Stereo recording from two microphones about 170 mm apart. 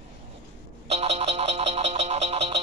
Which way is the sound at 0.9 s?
40° right (ahead or behind).